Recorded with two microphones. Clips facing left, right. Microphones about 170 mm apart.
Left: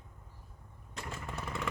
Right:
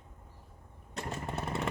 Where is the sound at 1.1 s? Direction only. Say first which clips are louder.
Right 5 dB; 35° right (ahead or behind).